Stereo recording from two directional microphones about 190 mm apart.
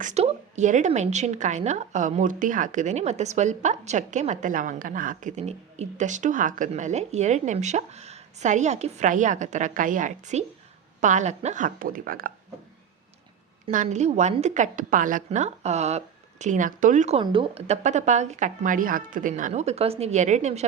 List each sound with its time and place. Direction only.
0.0 s a woman's voice: 35° right (ahead or behind)
13.7 s a woman's voice: 40° right (ahead or behind)